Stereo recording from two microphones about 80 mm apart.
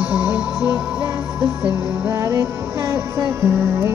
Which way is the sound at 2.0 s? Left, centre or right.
Right.